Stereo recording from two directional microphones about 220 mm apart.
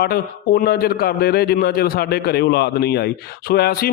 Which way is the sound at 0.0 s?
45° left (ahead or behind).